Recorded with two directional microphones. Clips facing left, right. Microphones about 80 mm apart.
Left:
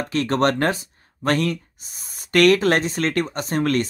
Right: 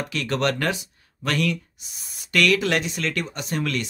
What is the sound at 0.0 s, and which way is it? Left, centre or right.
Speech, left.